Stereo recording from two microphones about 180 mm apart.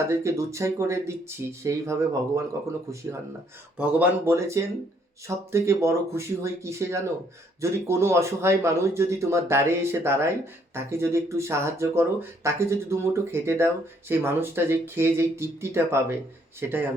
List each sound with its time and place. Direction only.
0.1 s speech: 15° right (ahead or behind)
3.8 s speech: 10° right (ahead or behind)